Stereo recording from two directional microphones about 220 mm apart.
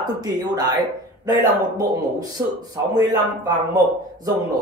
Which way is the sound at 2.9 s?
15° right (ahead or behind).